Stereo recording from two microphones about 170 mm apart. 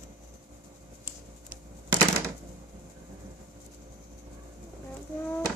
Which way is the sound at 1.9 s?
20° right (ahead or behind).